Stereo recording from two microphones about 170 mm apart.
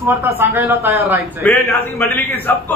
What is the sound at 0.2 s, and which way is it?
A man's voice, 10° right (ahead or behind).